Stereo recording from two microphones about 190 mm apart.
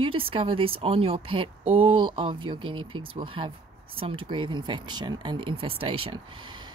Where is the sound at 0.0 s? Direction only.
30° right (ahead or behind).